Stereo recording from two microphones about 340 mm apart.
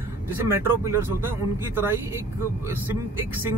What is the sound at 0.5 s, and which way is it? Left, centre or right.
Speech, centre.